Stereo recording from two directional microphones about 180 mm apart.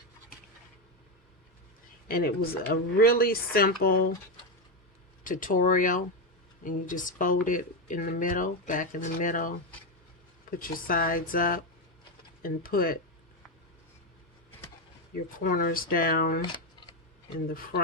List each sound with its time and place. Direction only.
2.0 s speech: 55° left (ahead or behind)
5.2 s speech: 50° left (ahead or behind)
10.6 s speech: 50° left (ahead or behind)
15.4 s speech: 50° left (ahead or behind)